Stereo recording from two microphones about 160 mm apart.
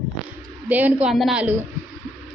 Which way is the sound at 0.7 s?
10° right (ahead or behind).